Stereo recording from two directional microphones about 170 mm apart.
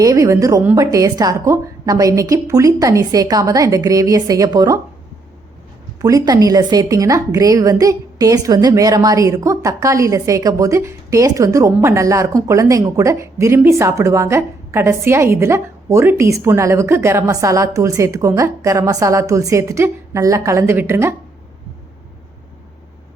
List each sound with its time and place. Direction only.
0.0 s a woman's voice: 20° right (ahead or behind)
6.0 s a woman's voice: 20° right (ahead or behind)